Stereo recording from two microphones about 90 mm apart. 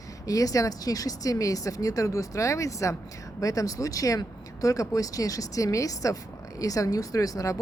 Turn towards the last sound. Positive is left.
turn(degrees=40)  # may be behind; listen again after turning